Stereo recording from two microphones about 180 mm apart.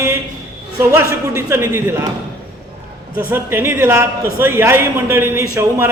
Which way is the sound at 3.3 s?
15° right (ahead or behind).